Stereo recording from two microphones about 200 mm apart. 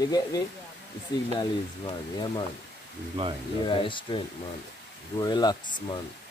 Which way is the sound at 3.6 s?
25° left (ahead or behind).